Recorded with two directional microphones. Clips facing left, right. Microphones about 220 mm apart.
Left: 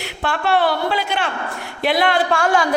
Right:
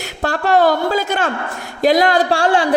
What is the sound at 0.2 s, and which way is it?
A man's voice, 40° right (ahead or behind).